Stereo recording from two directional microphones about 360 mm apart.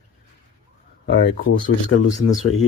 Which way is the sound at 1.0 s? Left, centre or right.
Left.